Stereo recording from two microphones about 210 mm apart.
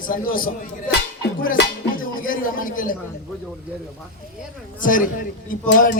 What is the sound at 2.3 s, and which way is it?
Speech, 40° left (ahead or behind).